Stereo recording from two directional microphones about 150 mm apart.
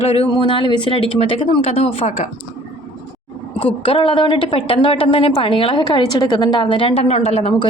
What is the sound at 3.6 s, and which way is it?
A woman's voice, 35° left (ahead or behind).